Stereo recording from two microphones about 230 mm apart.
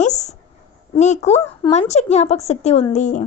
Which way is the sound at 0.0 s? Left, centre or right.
Left.